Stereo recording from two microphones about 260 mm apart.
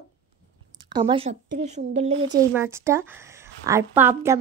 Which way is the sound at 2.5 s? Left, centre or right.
Centre.